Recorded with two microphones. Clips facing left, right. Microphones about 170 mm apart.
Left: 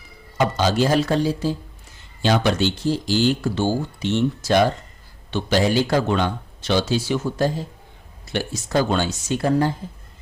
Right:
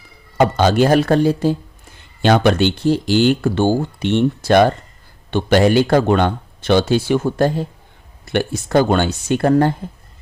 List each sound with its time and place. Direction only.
0.3 s speech: 55° right (ahead or behind)